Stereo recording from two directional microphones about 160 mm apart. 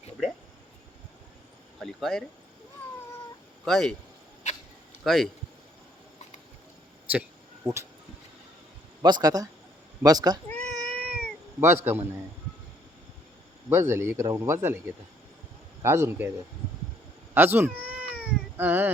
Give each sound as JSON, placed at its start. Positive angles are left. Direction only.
{"t": 1.8, "sound": "speech", "side_deg": 0}
{"t": 3.6, "sound": "speech", "side_deg": 0}
{"t": 5.0, "sound": "speech", "side_deg": 0}
{"t": 7.1, "sound": "a sound", "side_deg": -10}
{"t": 9.0, "sound": "speech", "side_deg": -25}
{"t": 10.5, "sound": "cat", "side_deg": 5}
{"t": 10.8, "sound": "cat", "side_deg": -10}
{"t": 13.7, "sound": "speech", "side_deg": -15}
{"t": 15.8, "sound": "speech", "side_deg": -15}
{"t": 17.3, "sound": "cat", "side_deg": -10}